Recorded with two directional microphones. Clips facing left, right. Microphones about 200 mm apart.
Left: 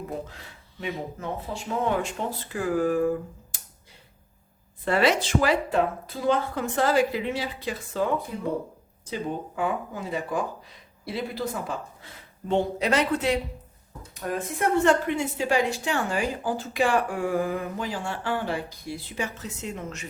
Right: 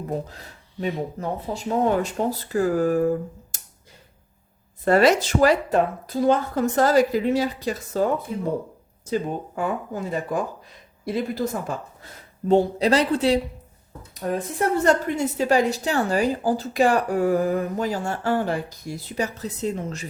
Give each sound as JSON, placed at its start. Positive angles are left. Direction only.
{"t": 0.3, "sound": "speech", "side_deg": -40}
{"t": 3.5, "sound": "a sound", "side_deg": -45}
{"t": 4.9, "sound": "speech", "side_deg": -45}
{"t": 12.5, "sound": "speech", "side_deg": -35}